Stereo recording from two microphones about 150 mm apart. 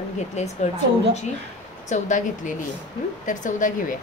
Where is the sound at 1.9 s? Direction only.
55° left (ahead or behind).